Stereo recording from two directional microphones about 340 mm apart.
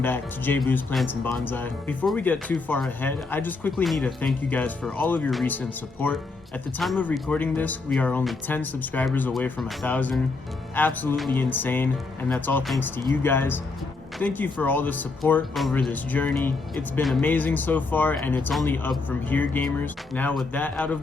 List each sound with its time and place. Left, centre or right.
0.0 s speech: centre